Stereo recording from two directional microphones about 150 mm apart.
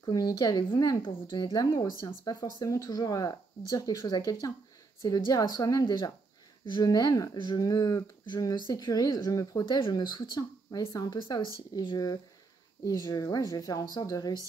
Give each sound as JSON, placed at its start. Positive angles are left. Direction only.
{"t": 0.0, "sound": "speech", "side_deg": 25}